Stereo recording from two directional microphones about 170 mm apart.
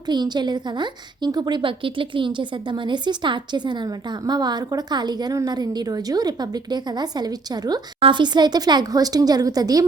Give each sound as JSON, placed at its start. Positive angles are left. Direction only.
{"t": 0.1, "sound": "a woman's voice", "side_deg": -25}